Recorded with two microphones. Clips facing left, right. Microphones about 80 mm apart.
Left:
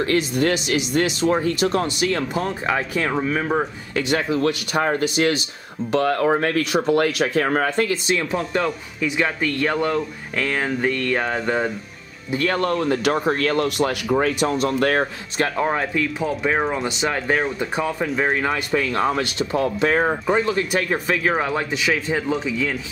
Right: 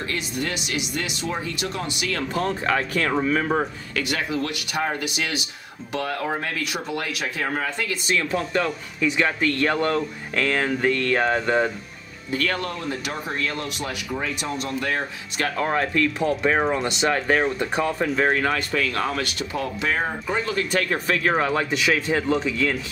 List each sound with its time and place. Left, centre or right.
0.0 s speech: left
2.3 s speech: centre
3.9 s speech: left
8.6 s speech: centre
12.4 s speech: left
12.6 s speech: left
15.3 s speech: left
15.6 s speech: centre; by 20.6 s left
20.7 s speech: centre
21.3 s speech: centre